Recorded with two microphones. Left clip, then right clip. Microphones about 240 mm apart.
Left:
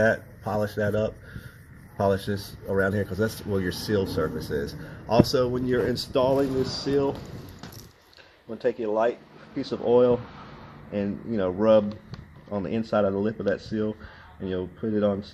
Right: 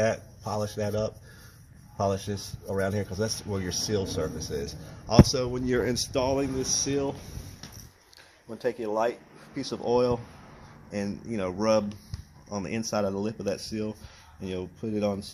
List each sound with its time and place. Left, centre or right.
0.0 s speech: right
8.6 s speech: centre